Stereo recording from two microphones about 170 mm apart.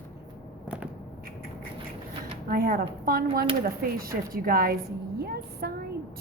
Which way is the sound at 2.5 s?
60° right (ahead or behind).